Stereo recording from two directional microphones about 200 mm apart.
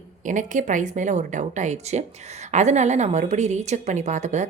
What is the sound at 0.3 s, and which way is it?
Speech, 40° right (ahead or behind).